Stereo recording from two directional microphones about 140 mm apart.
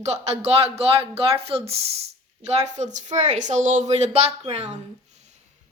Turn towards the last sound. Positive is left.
turn(degrees=-50)  # may be behind; listen again after turning